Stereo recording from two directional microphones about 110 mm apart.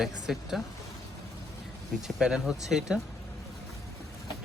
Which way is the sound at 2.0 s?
5° right (ahead or behind).